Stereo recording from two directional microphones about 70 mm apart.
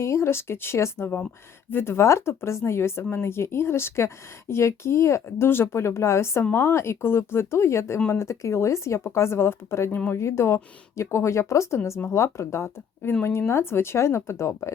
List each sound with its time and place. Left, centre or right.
0.0 s speech: left
9.9 s speech: left
10.2 s speech: left